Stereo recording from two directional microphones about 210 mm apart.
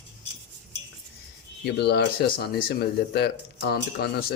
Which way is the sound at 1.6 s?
50° left (ahead or behind).